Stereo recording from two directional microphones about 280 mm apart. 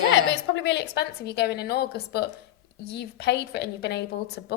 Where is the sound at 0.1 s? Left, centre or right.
Left.